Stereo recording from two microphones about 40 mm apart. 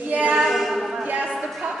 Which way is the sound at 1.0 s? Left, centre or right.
Right.